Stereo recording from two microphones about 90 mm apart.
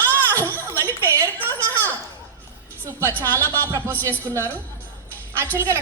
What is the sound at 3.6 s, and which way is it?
Speech, 30° right (ahead or behind).